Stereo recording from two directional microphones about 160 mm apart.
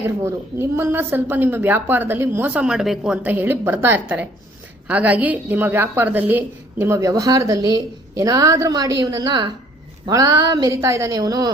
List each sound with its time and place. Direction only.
0.2 s a woman's voice: 15° right (ahead or behind)